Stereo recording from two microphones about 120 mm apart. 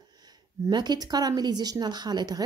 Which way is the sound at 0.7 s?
35° right (ahead or behind).